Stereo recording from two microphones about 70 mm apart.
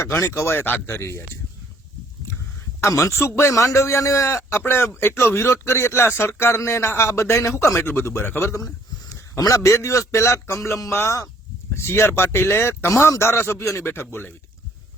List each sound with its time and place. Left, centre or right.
0.0 s speech: left
2.8 s a man's voice: left